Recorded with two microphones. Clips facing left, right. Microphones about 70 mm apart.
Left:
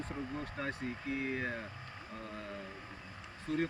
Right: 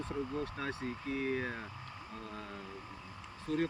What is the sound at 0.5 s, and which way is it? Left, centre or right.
Speech, left.